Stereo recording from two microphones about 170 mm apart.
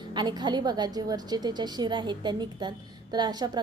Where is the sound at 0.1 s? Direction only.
25° right (ahead or behind).